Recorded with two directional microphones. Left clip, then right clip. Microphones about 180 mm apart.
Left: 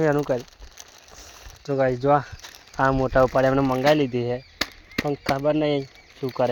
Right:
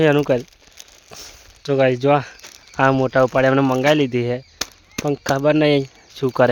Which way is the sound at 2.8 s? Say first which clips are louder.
Right 4 dB; 40° right (ahead or behind).